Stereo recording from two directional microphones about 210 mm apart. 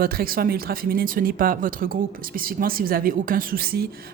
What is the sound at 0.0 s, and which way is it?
Speech, 45° right (ahead or behind).